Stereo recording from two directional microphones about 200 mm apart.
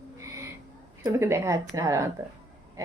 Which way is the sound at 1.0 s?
15° right (ahead or behind).